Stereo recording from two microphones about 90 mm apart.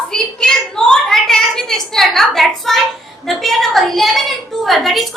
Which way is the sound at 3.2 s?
Centre (ahead or behind).